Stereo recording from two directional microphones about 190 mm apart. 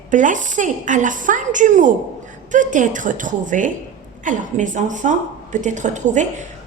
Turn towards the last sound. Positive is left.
turn(degrees=-40)  # may be behind; listen again after turning